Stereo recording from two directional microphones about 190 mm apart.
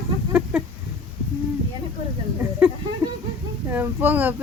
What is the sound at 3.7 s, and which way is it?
Speech, 10° right (ahead or behind).